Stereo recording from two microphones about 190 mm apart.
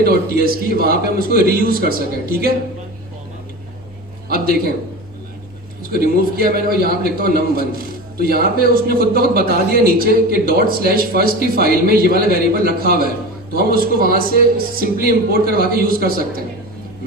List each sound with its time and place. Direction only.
0.0 s a man's voice: 50° right (ahead or behind)
5.9 s a man's voice: 50° right (ahead or behind)